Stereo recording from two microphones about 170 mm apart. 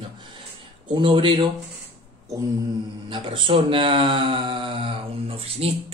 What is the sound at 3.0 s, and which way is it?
Speech, 30° right (ahead or behind).